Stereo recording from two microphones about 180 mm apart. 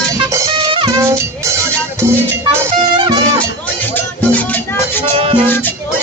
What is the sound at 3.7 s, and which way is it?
Music, 10° left (ahead or behind).